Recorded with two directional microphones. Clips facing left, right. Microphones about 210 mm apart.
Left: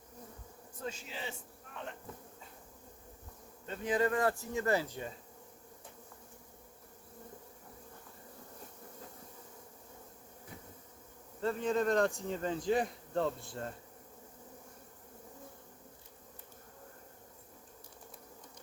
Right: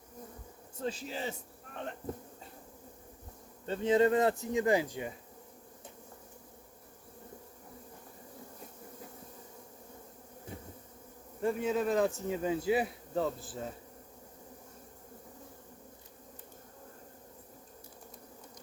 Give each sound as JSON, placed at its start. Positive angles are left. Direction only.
{"t": 0.8, "sound": "a man's voice", "side_deg": -35}
{"t": 3.7, "sound": "speech", "side_deg": -25}
{"t": 11.3, "sound": "speech", "side_deg": -10}